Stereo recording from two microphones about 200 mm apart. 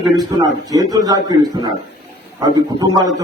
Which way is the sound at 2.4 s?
20° right (ahead or behind).